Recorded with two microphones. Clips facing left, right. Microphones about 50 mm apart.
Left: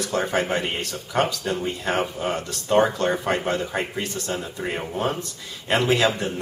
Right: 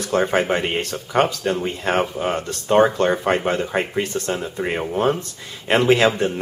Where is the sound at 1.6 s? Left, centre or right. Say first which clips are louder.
Right 2 dB; right.